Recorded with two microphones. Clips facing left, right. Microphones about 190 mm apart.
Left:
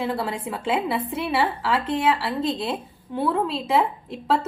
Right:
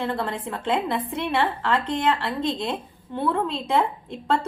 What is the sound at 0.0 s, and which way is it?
A woman's voice, 5° left (ahead or behind).